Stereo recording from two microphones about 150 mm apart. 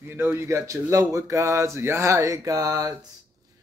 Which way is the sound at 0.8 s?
20° right (ahead or behind).